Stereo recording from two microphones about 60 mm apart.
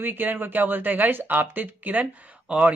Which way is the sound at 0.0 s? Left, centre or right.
Right.